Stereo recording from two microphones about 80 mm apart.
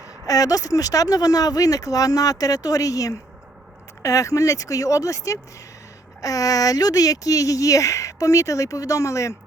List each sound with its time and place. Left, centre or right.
0.3 s speech: left